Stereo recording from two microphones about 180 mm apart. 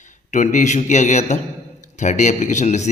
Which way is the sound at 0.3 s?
40° left (ahead or behind).